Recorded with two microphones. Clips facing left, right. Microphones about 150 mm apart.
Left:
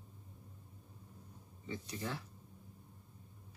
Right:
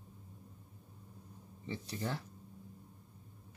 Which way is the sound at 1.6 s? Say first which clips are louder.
Right 2 dB; 30° right (ahead or behind).